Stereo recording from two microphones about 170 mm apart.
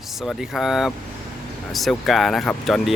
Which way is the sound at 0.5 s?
Centre (ahead or behind).